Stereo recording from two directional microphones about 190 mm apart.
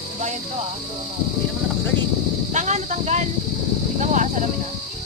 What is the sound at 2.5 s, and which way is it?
Speech, 40° right (ahead or behind).